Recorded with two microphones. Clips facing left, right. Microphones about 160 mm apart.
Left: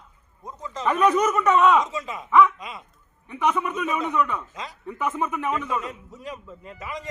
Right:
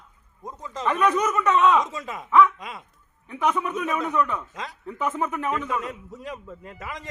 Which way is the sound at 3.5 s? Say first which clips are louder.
Even; 10° left (ahead or behind).